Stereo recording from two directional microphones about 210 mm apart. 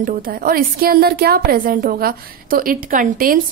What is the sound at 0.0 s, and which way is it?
A woman's voice, 40° right (ahead or behind).